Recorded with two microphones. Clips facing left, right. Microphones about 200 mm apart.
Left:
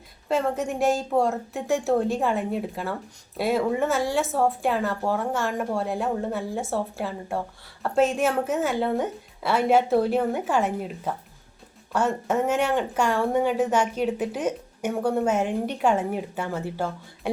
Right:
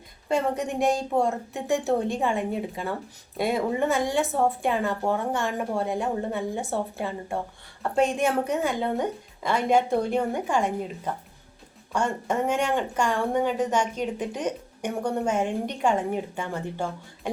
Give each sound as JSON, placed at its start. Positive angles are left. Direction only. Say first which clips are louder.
{"t": 0.3, "sound": "a woman's voice", "louder": "left 1 dB", "side_deg": 0}